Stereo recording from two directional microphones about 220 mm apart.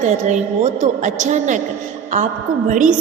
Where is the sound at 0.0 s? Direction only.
35° right (ahead or behind).